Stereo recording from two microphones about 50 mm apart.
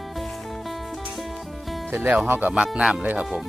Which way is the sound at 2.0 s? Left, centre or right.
Right.